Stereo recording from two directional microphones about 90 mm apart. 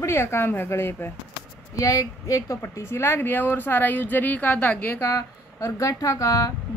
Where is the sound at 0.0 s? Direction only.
30° left (ahead or behind).